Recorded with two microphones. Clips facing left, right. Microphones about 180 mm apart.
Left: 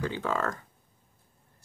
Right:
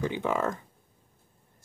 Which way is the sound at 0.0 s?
20° right (ahead or behind).